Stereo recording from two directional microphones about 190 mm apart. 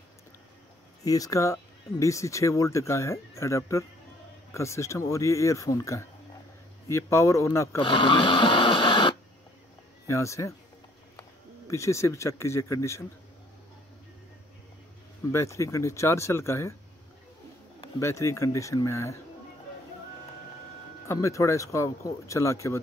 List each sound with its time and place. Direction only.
1.0 s speech: 20° left (ahead or behind)
7.9 s printer: 25° left (ahead or behind)
10.0 s speech: 15° left (ahead or behind)
15.3 s speech: 15° left (ahead or behind)
17.9 s speech: 15° left (ahead or behind)
21.1 s speech: 15° left (ahead or behind)